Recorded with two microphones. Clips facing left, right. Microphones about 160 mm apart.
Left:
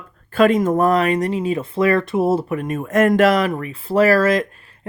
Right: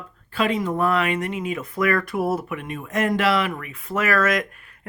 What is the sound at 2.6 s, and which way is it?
Speech, 45° left (ahead or behind).